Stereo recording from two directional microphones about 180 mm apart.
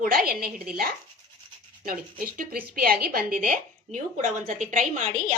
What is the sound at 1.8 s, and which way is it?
Speech, 50° right (ahead or behind).